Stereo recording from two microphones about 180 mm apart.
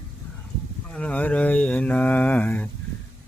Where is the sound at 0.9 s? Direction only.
5° left (ahead or behind).